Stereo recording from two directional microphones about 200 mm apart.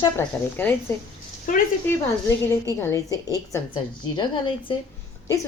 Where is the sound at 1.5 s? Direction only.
40° left (ahead or behind).